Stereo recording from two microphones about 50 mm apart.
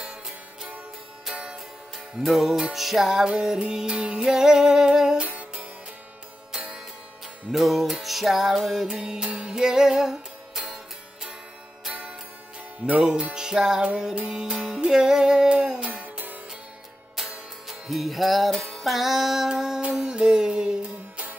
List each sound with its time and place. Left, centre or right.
0.0 s music: centre
2.2 s music: centre
4.2 s music: centre
5.2 s music: right
7.5 s music: centre
11.9 s music: right
12.8 s music: centre; by 16.3 s right
17.1 s music: centre